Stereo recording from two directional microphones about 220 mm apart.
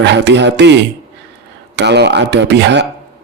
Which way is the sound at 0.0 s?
50° right (ahead or behind).